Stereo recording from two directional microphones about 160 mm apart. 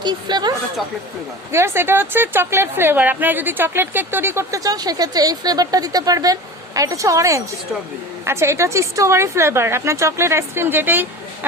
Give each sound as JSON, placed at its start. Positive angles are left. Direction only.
{"t": 0.0, "sound": "a woman's voice", "side_deg": -25}
{"t": 1.5, "sound": "a woman's voice", "side_deg": -15}